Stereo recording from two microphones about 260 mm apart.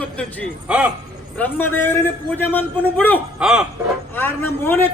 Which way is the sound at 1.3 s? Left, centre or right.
Centre.